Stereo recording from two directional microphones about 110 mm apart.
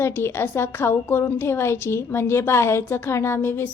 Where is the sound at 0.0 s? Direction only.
20° left (ahead or behind).